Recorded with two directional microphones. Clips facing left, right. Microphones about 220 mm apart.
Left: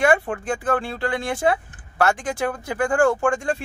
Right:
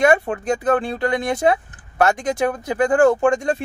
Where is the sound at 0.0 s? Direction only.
20° right (ahead or behind).